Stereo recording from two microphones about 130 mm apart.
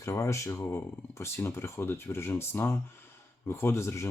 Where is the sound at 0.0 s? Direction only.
20° left (ahead or behind).